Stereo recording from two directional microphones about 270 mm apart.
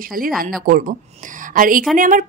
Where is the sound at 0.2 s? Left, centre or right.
Right.